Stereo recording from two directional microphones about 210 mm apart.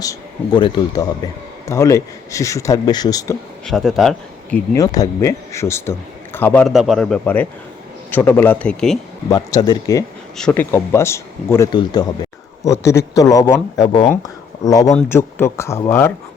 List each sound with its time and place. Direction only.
0.0 s speech: 20° left (ahead or behind)
3.7 s a man's voice: centre (ahead or behind)
4.5 s a man's voice: 15° left (ahead or behind)
9.3 s speech: 20° left (ahead or behind)
10.3 s speech: 5° left (ahead or behind)